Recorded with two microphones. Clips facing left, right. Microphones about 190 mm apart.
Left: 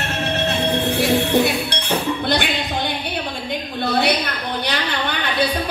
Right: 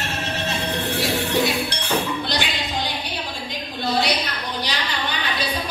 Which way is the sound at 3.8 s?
60° left (ahead or behind).